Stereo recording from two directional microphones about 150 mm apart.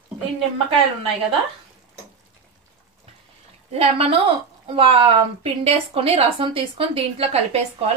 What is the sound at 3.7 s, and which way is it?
A woman's voice, 40° right (ahead or behind).